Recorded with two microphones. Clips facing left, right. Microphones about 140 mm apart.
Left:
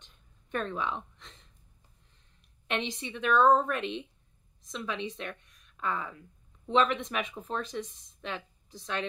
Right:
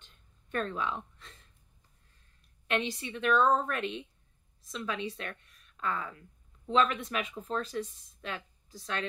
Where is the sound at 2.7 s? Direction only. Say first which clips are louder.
Right 1 dB; 20° left (ahead or behind).